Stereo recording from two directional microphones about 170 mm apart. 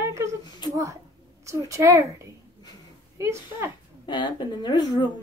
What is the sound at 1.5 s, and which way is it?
Speech, 20° right (ahead or behind).